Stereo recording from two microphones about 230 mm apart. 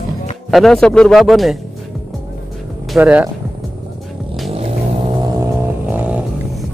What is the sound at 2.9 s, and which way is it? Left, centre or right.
Speech, centre.